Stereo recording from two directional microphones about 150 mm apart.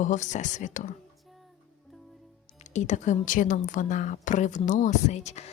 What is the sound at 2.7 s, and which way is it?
A woman's voice, 55° left (ahead or behind).